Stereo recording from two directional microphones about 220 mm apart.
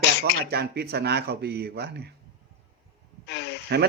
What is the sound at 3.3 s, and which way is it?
Speech, 50° left (ahead or behind).